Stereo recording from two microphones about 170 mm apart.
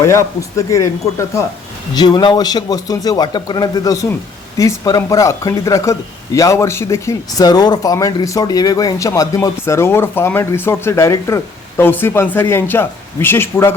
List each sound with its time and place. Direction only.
0.0 s a man's voice: 15° left (ahead or behind)
2.0 s a man's voice: 25° left (ahead or behind)